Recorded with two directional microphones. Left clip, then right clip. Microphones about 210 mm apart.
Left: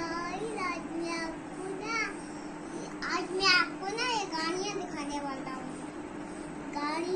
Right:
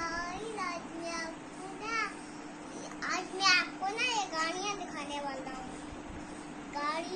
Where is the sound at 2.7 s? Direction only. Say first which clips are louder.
Left 2 dB; 20° right (ahead or behind).